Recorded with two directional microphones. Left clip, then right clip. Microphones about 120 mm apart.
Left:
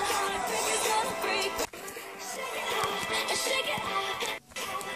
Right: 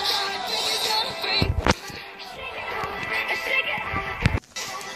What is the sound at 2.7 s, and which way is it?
Music, 30° left (ahead or behind).